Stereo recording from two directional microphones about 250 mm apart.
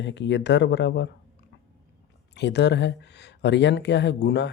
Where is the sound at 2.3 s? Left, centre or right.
Left.